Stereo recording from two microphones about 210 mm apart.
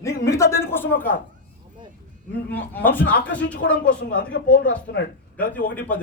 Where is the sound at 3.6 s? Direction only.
60° left (ahead or behind).